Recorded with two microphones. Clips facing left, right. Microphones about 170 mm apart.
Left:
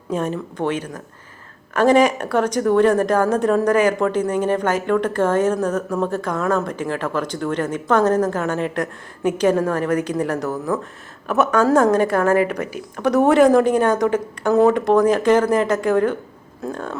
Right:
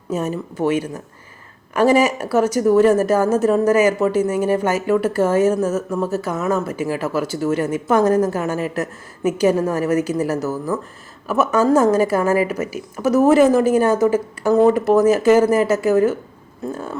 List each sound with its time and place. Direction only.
0.1 s a woman's voice: 5° right (ahead or behind)